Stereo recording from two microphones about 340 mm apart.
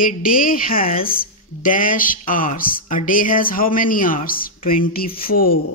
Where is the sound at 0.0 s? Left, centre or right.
Left.